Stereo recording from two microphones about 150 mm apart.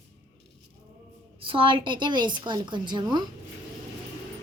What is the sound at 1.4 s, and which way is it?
A woman's voice, 35° right (ahead or behind).